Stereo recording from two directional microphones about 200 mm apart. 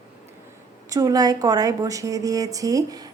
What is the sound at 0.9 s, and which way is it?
A woman's voice, 15° right (ahead or behind).